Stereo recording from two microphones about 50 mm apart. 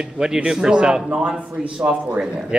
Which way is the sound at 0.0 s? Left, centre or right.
Centre.